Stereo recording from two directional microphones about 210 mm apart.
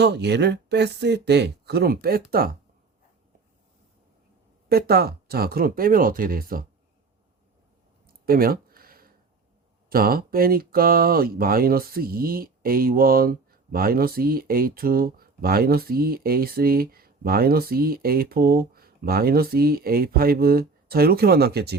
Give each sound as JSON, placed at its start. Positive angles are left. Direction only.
{"t": 0.0, "sound": "speech", "side_deg": -55}
{"t": 4.7, "sound": "speech", "side_deg": -50}
{"t": 8.0, "sound": "a sound", "side_deg": -45}
{"t": 9.9, "sound": "speech", "side_deg": -45}